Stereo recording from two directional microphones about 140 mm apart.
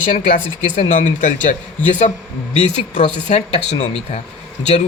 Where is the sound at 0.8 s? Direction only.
70° left (ahead or behind).